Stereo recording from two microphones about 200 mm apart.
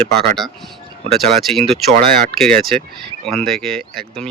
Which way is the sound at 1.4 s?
Centre (ahead or behind).